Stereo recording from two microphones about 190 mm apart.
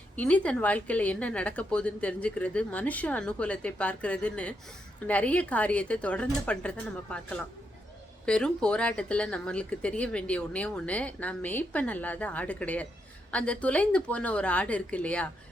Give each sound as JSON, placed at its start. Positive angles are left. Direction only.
{"t": 0.2, "sound": "speech", "side_deg": 5}